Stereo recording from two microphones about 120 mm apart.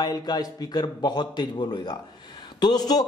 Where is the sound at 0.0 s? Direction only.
35° left (ahead or behind).